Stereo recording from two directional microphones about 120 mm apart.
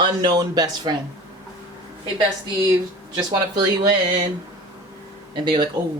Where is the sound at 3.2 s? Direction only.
35° right (ahead or behind).